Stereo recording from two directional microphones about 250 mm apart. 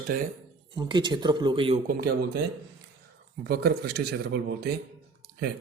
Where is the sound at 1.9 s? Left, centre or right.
Right.